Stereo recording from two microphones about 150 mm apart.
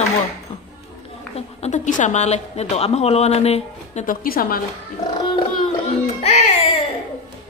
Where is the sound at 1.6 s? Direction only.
55° left (ahead or behind).